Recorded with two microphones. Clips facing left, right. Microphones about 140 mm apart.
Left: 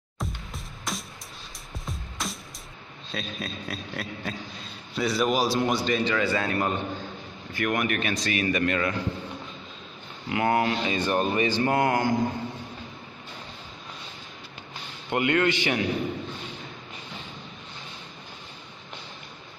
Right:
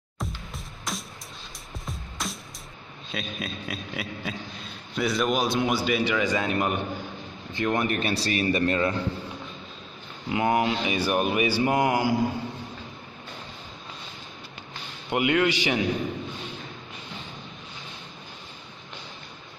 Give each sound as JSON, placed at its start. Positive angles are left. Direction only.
{"t": 0.5, "sound": "music", "side_deg": 0}
{"t": 3.1, "sound": "a man's voice", "side_deg": 0}
{"t": 10.3, "sound": "speech", "side_deg": -20}
{"t": 15.0, "sound": "speech", "side_deg": -15}